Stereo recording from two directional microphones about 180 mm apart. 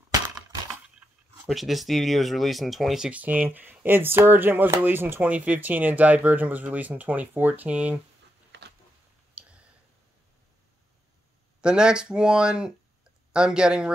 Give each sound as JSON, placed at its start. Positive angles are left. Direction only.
{"t": 0.9, "sound": "speech", "side_deg": -5}
{"t": 8.5, "sound": "a sound", "side_deg": -70}
{"t": 9.4, "sound": "clicking", "side_deg": -5}
{"t": 11.6, "sound": "speech", "side_deg": -5}